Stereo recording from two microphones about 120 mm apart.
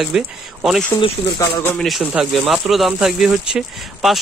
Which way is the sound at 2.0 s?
10° right (ahead or behind).